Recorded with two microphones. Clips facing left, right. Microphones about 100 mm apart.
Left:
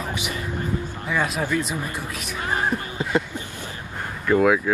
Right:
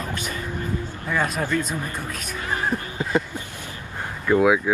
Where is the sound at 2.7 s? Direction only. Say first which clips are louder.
Even; 20° right (ahead or behind).